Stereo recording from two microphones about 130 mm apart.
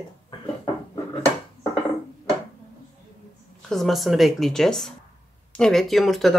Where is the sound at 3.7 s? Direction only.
Centre (ahead or behind).